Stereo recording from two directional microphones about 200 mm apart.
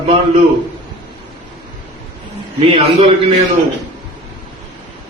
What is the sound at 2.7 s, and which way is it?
Speech, 25° right (ahead or behind).